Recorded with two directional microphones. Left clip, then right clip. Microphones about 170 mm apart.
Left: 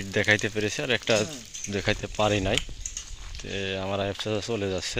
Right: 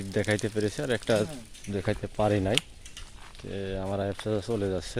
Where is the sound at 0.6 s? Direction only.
15° right (ahead or behind).